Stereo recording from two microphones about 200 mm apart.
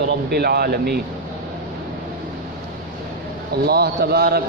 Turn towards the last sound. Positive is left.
turn(degrees=-50)  # may be behind; listen again after turning